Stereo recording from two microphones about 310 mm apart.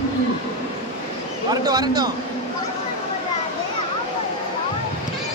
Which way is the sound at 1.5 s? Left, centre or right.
Centre.